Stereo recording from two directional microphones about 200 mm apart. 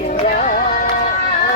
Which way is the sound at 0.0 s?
40° left (ahead or behind).